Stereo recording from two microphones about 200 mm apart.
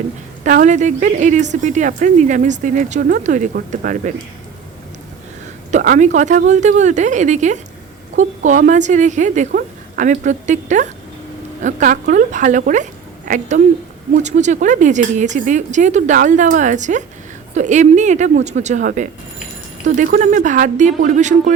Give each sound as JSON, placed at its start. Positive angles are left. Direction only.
{"t": 0.4, "sound": "speech", "side_deg": -40}
{"t": 5.7, "sound": "speech", "side_deg": -40}
{"t": 9.5, "sound": "speech", "side_deg": -50}